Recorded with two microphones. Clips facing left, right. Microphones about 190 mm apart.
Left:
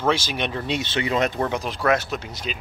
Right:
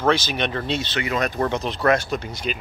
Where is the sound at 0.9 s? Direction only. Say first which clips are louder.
Left 4 dB; 25° left (ahead or behind).